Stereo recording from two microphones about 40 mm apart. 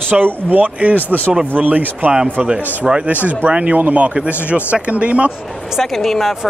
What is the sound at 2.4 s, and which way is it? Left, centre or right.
Speech, right.